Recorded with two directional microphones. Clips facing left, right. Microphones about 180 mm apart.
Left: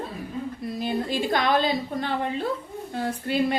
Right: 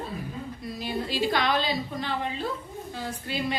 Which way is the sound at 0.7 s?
50° left (ahead or behind).